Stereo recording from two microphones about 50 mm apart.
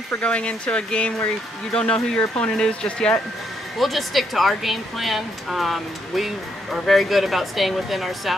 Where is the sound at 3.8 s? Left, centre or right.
Centre.